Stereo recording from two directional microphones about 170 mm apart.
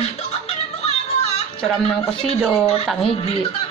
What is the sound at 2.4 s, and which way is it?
Speech, centre (ahead or behind).